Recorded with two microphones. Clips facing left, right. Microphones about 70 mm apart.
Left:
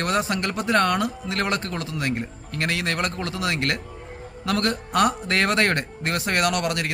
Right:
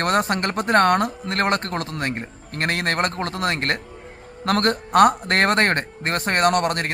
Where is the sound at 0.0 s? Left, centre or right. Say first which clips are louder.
Right 3 dB; right.